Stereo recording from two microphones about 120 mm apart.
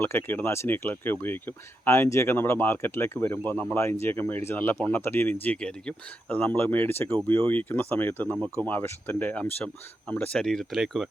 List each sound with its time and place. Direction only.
0.0 s speech: 20° left (ahead or behind)
3.8 s speech: 20° left (ahead or behind); by 11.1 s centre (ahead or behind)